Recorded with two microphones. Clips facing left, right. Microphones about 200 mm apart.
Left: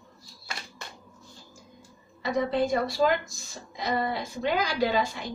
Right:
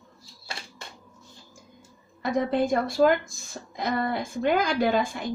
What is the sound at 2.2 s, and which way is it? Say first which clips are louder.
Speech: right 2 dB; 55° right (ahead or behind).